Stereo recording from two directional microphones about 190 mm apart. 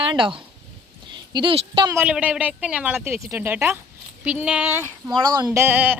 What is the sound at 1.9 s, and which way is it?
Speech, 5° right (ahead or behind).